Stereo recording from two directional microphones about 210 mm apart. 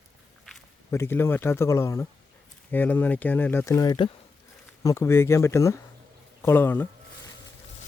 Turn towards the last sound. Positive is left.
turn(degrees=10)  # may be behind; listen again after turning